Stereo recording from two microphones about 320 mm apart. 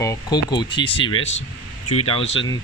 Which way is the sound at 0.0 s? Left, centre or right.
Centre.